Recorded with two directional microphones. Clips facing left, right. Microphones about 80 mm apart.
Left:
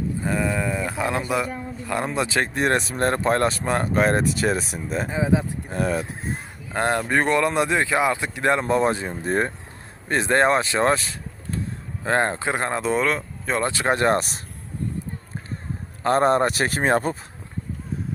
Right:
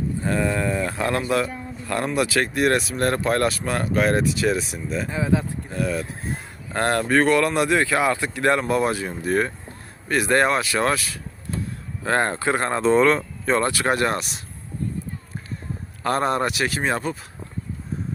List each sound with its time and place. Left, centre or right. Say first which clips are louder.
0.2 s speech: right 2 dB; centre; by 5.0 s left
5.0 s speech: left 1 dB; centre
5.7 s speech: left 1 dB; left
6.7 s speech: right 2 dB; centre
12.0 s speech: even; centre
13.7 s speech: left 1 dB; left
14.2 s speech: left 4 dB; left
16.0 s speech: left 3 dB; left